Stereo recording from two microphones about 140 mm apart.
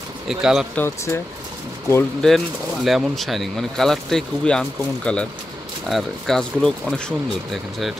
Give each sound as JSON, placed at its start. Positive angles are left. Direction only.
{"t": 0.3, "sound": "speech", "side_deg": -5}
{"t": 0.7, "sound": "speech", "side_deg": 15}
{"t": 2.2, "sound": "speech", "side_deg": 0}